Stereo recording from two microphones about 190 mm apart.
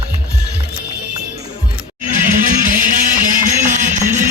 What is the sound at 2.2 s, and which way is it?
Music, 45° right (ahead or behind).